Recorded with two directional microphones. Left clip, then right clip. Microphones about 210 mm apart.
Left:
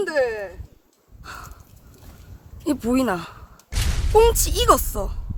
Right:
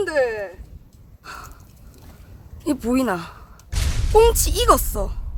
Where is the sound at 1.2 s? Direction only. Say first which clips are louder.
Right 1 dB; 5° left (ahead or behind).